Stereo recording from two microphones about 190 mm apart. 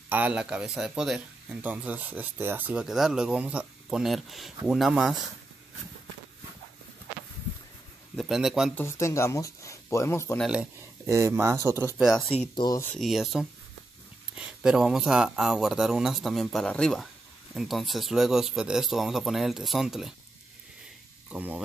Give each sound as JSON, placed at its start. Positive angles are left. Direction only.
{"t": 0.1, "sound": "speech", "side_deg": -5}
{"t": 8.2, "sound": "speech", "side_deg": 0}
{"t": 8.7, "sound": "speech", "side_deg": 15}
{"t": 10.4, "sound": "speech", "side_deg": -5}
{"t": 12.5, "sound": "speech", "side_deg": 20}
{"t": 12.9, "sound": "speech", "side_deg": 0}
{"t": 21.3, "sound": "speech", "side_deg": -10}